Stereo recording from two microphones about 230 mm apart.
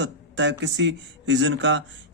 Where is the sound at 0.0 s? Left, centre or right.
Right.